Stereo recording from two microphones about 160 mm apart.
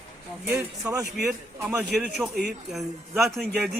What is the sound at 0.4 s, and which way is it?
A man's voice, 5° right (ahead or behind).